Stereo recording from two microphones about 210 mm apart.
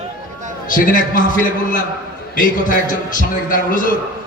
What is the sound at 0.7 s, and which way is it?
A man's voice, 40° left (ahead or behind).